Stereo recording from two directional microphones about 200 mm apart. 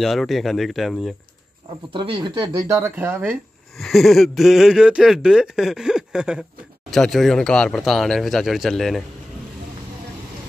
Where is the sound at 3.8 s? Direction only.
Centre (ahead or behind).